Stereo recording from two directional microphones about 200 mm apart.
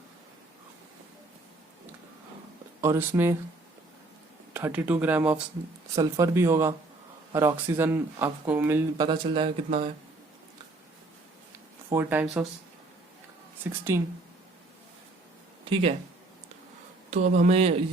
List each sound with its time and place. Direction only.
2.8 s speech: 10° right (ahead or behind)
4.5 s speech: 10° right (ahead or behind)
9.0 s speech: 25° right (ahead or behind)
11.9 s speech: 10° right (ahead or behind)
13.9 s speech: 15° right (ahead or behind)
15.7 s speech: 30° right (ahead or behind)
17.3 s speech: 35° right (ahead or behind)